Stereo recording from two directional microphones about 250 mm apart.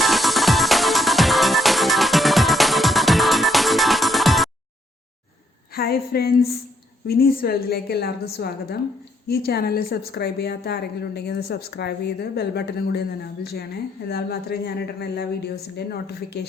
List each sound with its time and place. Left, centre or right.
0.0 s music: centre
5.7 s a woman's voice: left